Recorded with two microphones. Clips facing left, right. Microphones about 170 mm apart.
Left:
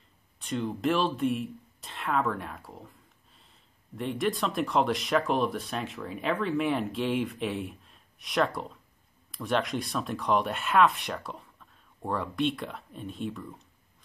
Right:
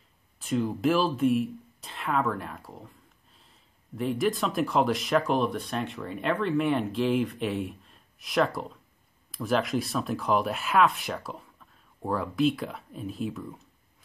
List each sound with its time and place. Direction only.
0.4 s speech: 5° right (ahead or behind)